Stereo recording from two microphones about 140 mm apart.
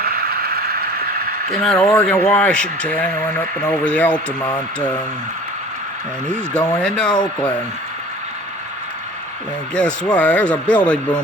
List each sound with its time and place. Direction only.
0.0 s a sound: 90° right
1.8 s speech: 10° left (ahead or behind)
6.2 s speech: 5° left (ahead or behind)
9.7 s speech: 5° left (ahead or behind)